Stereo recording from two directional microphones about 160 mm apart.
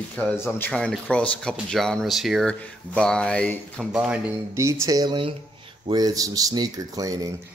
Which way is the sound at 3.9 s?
5° right (ahead or behind).